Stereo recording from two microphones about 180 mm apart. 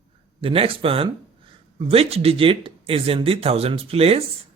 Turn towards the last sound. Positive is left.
turn(degrees=-35)  # may be behind; listen again after turning